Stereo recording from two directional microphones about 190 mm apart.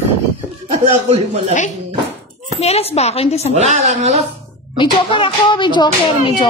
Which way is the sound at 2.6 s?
35° left (ahead or behind).